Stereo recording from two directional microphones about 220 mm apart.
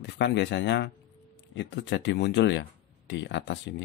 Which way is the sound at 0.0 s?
50° left (ahead or behind).